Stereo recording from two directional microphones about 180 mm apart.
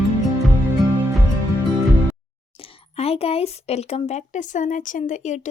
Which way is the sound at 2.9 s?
35° left (ahead or behind).